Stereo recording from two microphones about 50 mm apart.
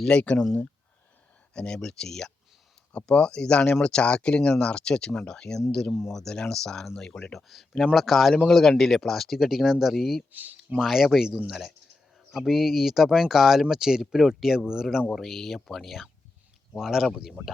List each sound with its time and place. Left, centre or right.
0.1 s speech: left
1.5 s speech: centre
5.9 s speech: centre
6.1 s speech: centre
7.3 s speech: centre
10.3 s speech: right
10.8 s speech: centre
15.1 s speech: centre
16.7 s speech: centre